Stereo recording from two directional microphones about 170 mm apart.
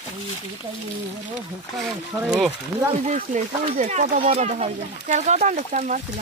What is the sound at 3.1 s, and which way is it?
Speech, 45° right (ahead or behind).